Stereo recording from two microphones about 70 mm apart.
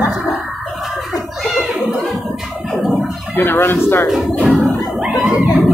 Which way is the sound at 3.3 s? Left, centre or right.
Left.